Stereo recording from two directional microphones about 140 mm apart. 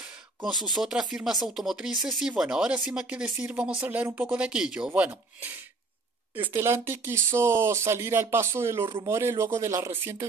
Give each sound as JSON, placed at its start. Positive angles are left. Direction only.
{"t": 0.7, "sound": "speech", "side_deg": -5}